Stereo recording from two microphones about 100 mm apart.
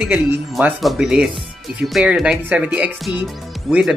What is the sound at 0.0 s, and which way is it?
Speech, 10° right (ahead or behind).